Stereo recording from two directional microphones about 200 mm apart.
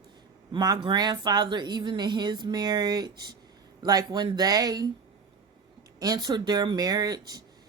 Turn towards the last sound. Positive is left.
turn(degrees=-20)  # may be behind; listen again after turning